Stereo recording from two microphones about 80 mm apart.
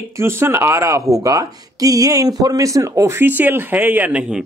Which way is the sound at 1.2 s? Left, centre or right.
Right.